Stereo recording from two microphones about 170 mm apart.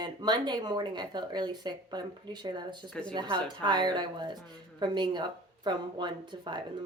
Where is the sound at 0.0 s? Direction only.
25° right (ahead or behind).